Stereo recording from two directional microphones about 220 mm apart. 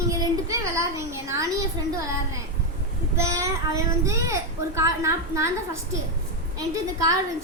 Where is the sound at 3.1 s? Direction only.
15° right (ahead or behind).